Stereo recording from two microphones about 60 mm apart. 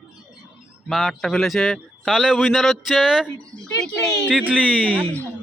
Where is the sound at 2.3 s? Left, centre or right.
Centre.